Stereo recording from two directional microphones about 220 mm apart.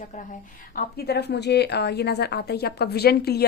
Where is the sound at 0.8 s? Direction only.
45° left (ahead or behind).